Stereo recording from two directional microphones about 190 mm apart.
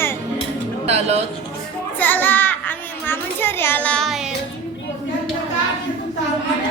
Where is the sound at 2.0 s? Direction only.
10° left (ahead or behind).